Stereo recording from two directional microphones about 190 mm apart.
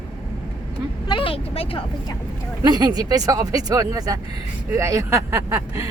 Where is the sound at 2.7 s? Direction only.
20° right (ahead or behind).